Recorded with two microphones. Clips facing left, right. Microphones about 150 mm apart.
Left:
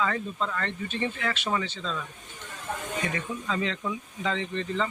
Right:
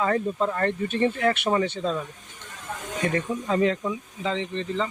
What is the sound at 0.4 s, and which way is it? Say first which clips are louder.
Speech: right 7 dB; 45° right (ahead or behind).